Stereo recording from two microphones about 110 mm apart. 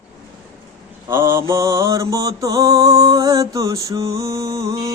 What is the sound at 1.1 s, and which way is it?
Mantra, 25° right (ahead or behind).